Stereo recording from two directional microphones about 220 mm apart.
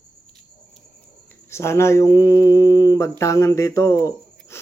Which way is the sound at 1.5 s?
10° left (ahead or behind).